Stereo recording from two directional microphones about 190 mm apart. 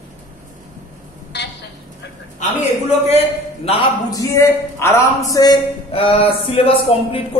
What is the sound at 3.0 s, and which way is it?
Speech, 35° left (ahead or behind).